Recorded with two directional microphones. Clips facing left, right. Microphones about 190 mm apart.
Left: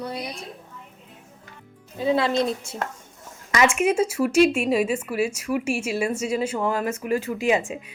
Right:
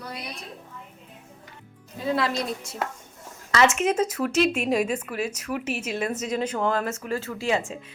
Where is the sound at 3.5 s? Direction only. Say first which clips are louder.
Left 1 dB; 10° left (ahead or behind).